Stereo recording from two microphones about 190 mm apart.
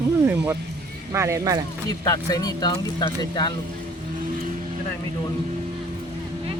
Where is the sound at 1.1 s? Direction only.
15° right (ahead or behind).